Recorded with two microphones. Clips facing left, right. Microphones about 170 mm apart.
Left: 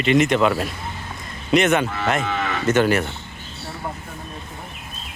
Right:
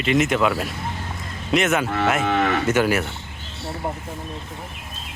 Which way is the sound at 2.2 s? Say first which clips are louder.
Right 5 dB; 60° right (ahead or behind).